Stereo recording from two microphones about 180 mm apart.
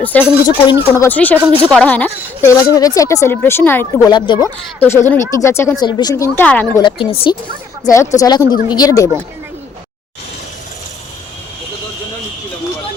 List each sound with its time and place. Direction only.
0.0 s speech: 10° left (ahead or behind)
0.4 s speech: 25° left (ahead or behind)
1.0 s speech: 10° left (ahead or behind)
4.1 s speech: 25° left (ahead or behind)
4.8 s speech: 15° left (ahead or behind)
6.7 s speech: 25° left (ahead or behind)
7.9 s speech: 20° left (ahead or behind)